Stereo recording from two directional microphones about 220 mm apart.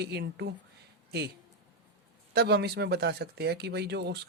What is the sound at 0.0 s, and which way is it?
Speech, 50° right (ahead or behind).